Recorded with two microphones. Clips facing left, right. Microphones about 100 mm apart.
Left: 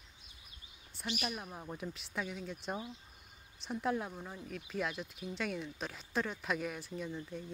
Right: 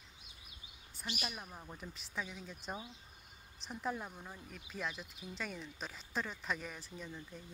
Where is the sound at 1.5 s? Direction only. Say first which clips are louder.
Left 5 dB; 20° left (ahead or behind).